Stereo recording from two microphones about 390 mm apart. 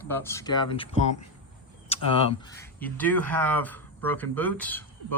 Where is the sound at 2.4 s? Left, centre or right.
Centre.